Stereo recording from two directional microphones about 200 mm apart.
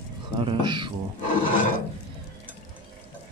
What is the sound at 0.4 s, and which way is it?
Speech, 25° right (ahead or behind).